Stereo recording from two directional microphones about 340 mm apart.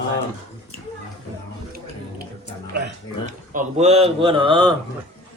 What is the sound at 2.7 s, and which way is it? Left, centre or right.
Speech, right.